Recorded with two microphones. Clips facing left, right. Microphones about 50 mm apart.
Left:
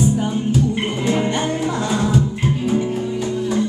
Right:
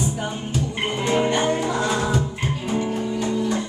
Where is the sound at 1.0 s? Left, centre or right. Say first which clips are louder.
Right 1 dB; centre.